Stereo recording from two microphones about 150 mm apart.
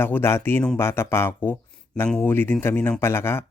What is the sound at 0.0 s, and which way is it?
Speech, 15° left (ahead or behind).